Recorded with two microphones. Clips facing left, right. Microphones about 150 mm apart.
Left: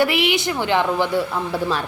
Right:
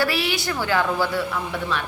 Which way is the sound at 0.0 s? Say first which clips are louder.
Left 5 dB; 20° left (ahead or behind).